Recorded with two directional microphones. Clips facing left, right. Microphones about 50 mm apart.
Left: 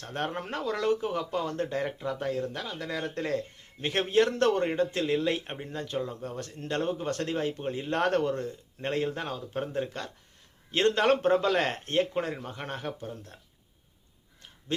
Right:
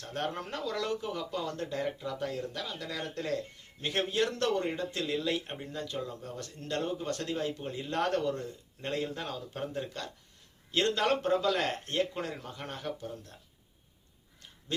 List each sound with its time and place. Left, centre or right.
0.0 s speech: left